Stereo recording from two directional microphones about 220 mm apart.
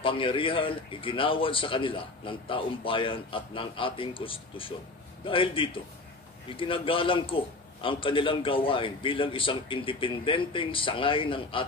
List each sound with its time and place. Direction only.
0.0 s a man's voice: 25° left (ahead or behind)